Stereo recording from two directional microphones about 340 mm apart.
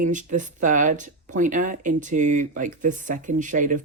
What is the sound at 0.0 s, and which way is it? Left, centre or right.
Speech, right.